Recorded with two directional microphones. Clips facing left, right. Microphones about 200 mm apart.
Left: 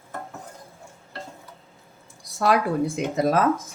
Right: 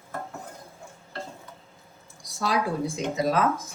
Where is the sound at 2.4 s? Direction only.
60° left (ahead or behind).